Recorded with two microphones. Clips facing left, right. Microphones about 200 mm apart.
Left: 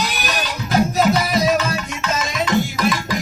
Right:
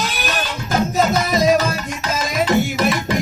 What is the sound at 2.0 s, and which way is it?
Music, 30° right (ahead or behind).